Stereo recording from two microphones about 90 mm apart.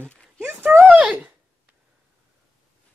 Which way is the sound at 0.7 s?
10° right (ahead or behind).